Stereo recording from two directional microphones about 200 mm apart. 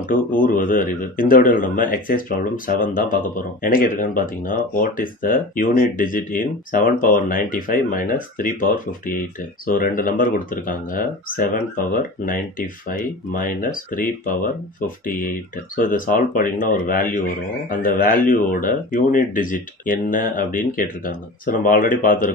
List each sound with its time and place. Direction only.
0.1 s speech: 40° left (ahead or behind)